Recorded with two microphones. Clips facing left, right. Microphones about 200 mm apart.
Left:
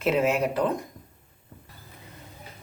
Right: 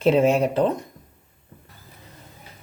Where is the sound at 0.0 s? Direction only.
30° right (ahead or behind).